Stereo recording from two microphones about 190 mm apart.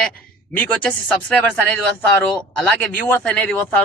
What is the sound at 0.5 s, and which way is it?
A man's voice, 5° left (ahead or behind).